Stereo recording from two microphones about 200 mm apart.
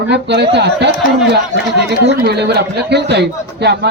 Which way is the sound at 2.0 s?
60° right (ahead or behind).